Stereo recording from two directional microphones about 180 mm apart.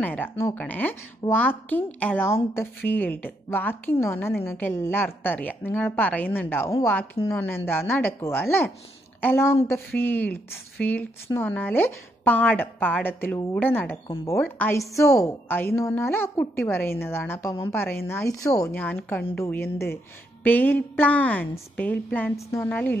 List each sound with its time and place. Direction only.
0.0 s a woman's voice: 10° left (ahead or behind)